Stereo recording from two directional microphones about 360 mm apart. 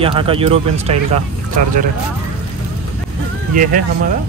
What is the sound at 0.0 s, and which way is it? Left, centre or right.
Speech, centre.